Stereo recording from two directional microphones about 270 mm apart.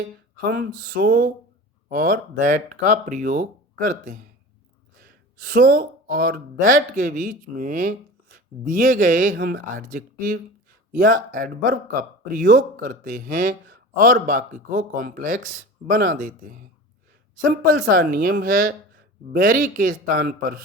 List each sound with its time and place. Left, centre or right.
0.3 s speech: right